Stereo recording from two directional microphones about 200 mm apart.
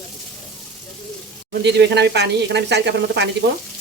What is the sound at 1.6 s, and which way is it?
Speech, 60° right (ahead or behind).